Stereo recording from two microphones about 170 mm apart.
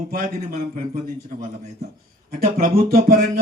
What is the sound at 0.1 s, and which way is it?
Speech, 60° right (ahead or behind).